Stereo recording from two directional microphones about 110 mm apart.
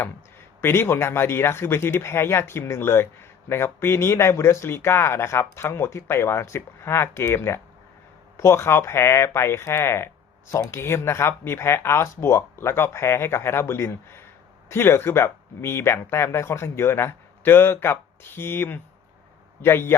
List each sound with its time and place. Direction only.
0.6 s speech: 20° left (ahead or behind)